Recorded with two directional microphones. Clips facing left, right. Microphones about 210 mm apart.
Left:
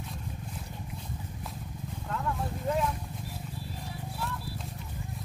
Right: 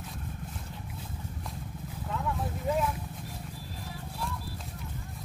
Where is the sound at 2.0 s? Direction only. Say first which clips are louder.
Even; 5° right (ahead or behind).